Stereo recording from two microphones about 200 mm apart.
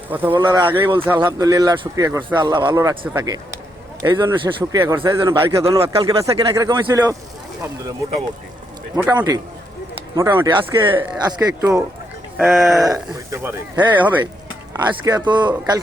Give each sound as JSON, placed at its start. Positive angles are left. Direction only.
{"t": 0.1, "sound": "a man's voice", "side_deg": -10}
{"t": 5.8, "sound": "a man's voice", "side_deg": -25}
{"t": 9.0, "sound": "a man's voice", "side_deg": -20}
{"t": 12.4, "sound": "speech", "side_deg": 0}
{"t": 13.3, "sound": "a man's voice", "side_deg": -15}